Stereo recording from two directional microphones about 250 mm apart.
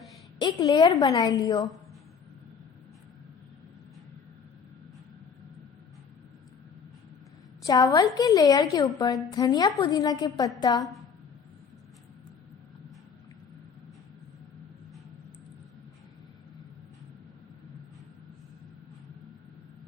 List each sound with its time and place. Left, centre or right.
0.3 s a woman's voice: centre
7.6 s a woman's voice: centre